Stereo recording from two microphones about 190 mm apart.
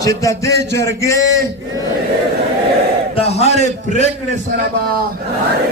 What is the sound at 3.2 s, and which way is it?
Speech, 35° left (ahead or behind).